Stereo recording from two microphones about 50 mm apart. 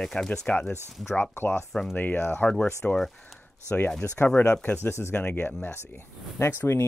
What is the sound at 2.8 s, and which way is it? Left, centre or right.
Speech, left.